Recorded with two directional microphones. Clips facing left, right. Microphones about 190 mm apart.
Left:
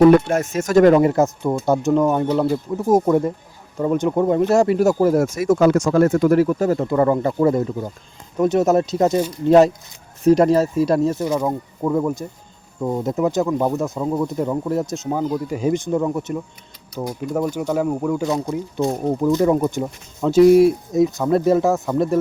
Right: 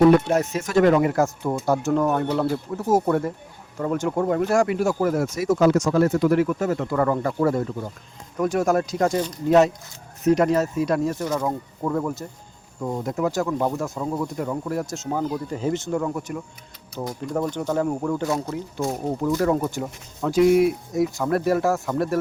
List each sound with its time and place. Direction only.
0.3 s speech: 50° left (ahead or behind)
1.1 s speech: 20° left (ahead or behind)
5.2 s speech: 50° left (ahead or behind); by 6.8 s 35° left (ahead or behind)
6.8 s speech: 25° left (ahead or behind)
9.5 s speech: 35° left (ahead or behind)
11.1 s speech: 15° left (ahead or behind)
17.0 s speech: 5° left (ahead or behind)
20.4 s speech: 35° left (ahead or behind)
20.9 s speech: 20° left (ahead or behind)